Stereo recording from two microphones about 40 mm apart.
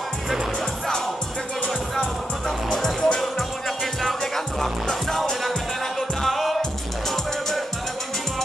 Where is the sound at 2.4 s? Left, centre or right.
Centre.